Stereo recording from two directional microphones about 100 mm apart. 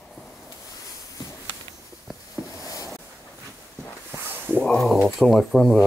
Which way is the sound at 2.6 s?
35° left (ahead or behind).